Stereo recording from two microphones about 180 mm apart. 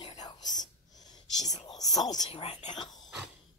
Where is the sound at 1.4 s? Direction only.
20° left (ahead or behind).